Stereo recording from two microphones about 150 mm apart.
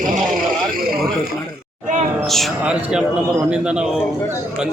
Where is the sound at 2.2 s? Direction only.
Centre (ahead or behind).